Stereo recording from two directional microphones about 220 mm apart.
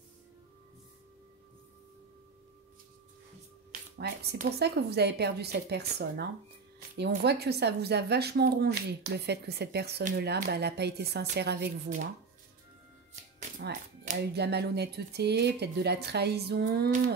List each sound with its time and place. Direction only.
4.0 s speech: 45° right (ahead or behind)
13.6 s speech: 40° right (ahead or behind)